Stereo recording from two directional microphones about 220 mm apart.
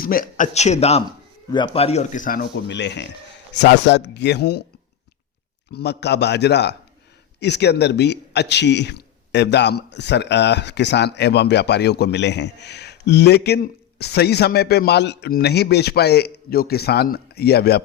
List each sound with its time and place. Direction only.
0.0 s a man's voice: 40° left (ahead or behind)
5.7 s a man's voice: 50° left (ahead or behind)